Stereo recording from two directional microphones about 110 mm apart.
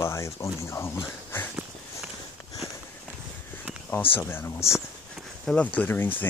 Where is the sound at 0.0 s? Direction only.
25° left (ahead or behind).